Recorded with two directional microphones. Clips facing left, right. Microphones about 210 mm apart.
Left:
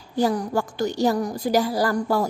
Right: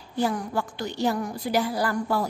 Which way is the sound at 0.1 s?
35° left (ahead or behind).